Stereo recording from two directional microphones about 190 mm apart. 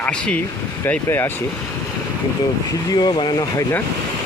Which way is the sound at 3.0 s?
20° left (ahead or behind).